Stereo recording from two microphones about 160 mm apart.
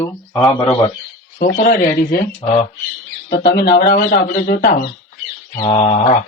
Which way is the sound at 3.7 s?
90° left.